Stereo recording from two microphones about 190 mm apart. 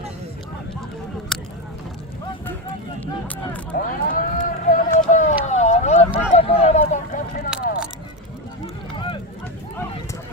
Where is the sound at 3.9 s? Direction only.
45° left (ahead or behind).